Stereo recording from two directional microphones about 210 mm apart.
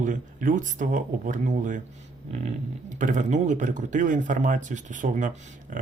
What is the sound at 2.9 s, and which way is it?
Speech, 35° right (ahead or behind).